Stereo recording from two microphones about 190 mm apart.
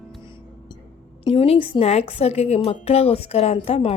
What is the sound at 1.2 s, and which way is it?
A woman's voice, 30° left (ahead or behind).